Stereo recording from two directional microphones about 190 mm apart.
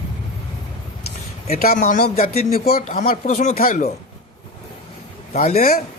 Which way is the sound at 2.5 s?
50° left (ahead or behind).